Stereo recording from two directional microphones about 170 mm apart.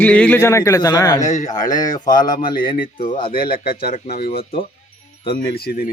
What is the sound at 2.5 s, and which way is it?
Speech, 55° left (ahead or behind).